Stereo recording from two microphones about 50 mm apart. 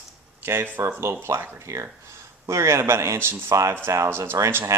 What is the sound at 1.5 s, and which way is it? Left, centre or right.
Speech, right.